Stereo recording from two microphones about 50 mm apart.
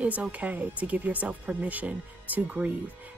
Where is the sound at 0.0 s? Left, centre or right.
Right.